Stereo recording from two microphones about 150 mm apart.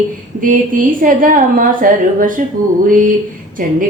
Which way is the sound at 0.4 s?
65° right (ahead or behind).